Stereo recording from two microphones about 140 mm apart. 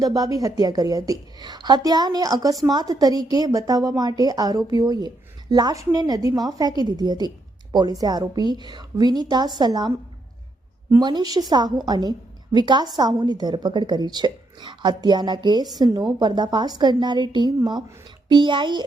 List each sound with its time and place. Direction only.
0.0 s a woman's voice: 25° right (ahead or behind)
11.0 s a woman's voice: 30° right (ahead or behind)